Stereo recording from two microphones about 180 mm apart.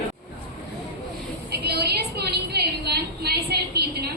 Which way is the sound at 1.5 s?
65° right (ahead or behind).